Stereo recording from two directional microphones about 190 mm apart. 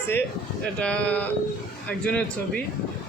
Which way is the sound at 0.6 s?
5° left (ahead or behind).